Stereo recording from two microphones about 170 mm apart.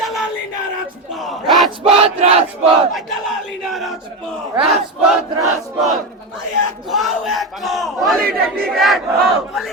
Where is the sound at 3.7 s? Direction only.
Centre (ahead or behind).